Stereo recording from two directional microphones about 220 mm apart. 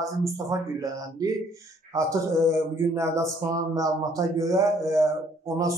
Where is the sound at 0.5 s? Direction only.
15° right (ahead or behind).